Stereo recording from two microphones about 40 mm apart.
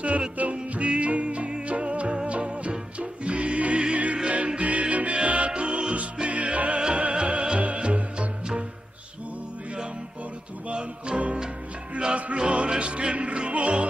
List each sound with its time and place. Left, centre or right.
0.4 s music: right
10.7 s music: right